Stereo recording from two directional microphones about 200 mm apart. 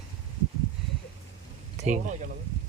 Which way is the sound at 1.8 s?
35° right (ahead or behind).